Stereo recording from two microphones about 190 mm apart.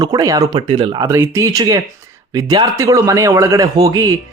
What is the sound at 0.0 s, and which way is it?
Speech, 20° right (ahead or behind).